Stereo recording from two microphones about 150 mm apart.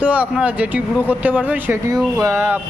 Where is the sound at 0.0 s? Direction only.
10° right (ahead or behind).